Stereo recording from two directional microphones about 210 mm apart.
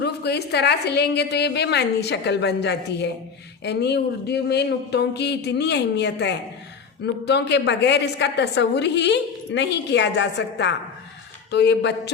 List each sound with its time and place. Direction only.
0.0 s a woman's voice: 50° left (ahead or behind)